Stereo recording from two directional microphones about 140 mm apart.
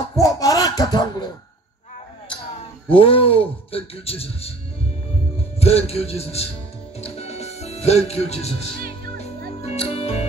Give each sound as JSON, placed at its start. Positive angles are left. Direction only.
{"t": 0.1, "sound": "a sound", "side_deg": 25}
{"t": 2.9, "sound": "speech", "side_deg": 40}
{"t": 5.6, "sound": "speech", "side_deg": 45}
{"t": 7.0, "sound": "music", "side_deg": 50}